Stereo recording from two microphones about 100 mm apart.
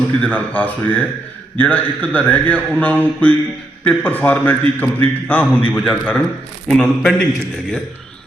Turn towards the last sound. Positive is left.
turn(degrees=5)  # may be behind; listen again after turning